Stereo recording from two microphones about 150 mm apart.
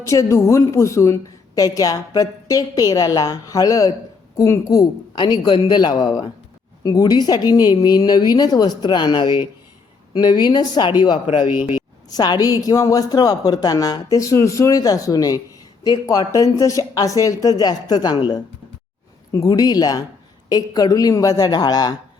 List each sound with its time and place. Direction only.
0.0 s speech: 20° left (ahead or behind)
12.1 s speech: 25° left (ahead or behind)